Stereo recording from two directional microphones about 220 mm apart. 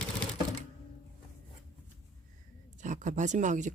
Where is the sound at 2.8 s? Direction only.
35° right (ahead or behind).